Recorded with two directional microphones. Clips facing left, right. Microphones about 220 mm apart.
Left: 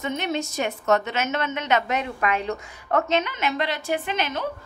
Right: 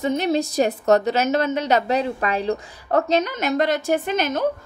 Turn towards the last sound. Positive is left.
turn(degrees=-45)  # may be behind; listen again after turning